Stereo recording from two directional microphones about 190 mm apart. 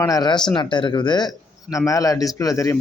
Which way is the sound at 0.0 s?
20° left (ahead or behind).